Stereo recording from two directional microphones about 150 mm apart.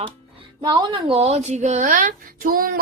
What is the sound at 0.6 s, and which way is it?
A woman's voice, 30° right (ahead or behind).